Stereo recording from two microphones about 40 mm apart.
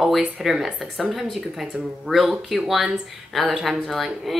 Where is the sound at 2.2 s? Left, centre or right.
Centre.